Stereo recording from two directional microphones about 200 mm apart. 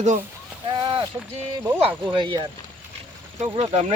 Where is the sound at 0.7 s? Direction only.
25° right (ahead or behind).